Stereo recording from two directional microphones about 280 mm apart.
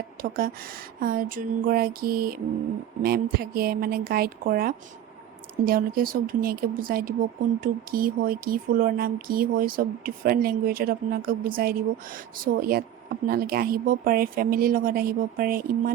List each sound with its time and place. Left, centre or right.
0.2 s speech: right